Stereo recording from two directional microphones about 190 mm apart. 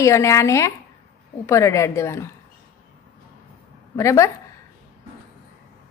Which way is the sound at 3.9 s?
15° left (ahead or behind).